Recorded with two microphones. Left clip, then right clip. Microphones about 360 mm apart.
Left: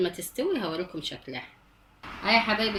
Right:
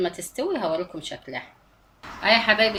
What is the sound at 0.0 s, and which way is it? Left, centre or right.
Speech, right.